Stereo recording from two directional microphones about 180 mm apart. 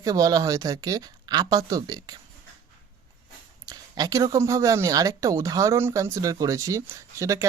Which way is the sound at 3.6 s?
20° right (ahead or behind).